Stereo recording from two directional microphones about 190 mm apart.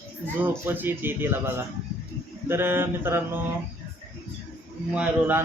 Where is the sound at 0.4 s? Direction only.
10° right (ahead or behind).